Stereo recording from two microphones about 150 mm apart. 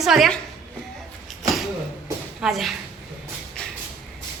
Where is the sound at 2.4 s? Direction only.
Centre (ahead or behind).